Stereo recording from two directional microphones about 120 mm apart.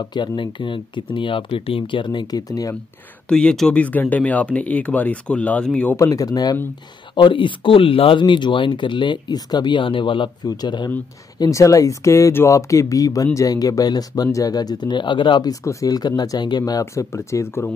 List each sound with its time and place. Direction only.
0.0 s speech: 40° left (ahead or behind)
3.3 s speech: 5° left (ahead or behind)
5.9 s speech: 25° left (ahead or behind)
7.2 s speech: 45° left (ahead or behind)
15.6 s speech: 25° left (ahead or behind)
16.8 s speech: 25° left (ahead or behind)